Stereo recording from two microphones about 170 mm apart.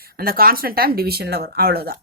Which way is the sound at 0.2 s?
60° right (ahead or behind).